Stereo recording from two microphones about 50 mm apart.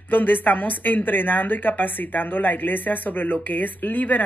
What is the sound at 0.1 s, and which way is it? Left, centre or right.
A woman's voice, left.